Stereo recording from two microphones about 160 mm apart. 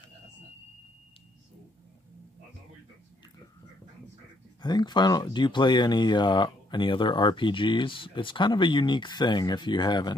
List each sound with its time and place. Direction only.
4.6 s speech: 25° left (ahead or behind)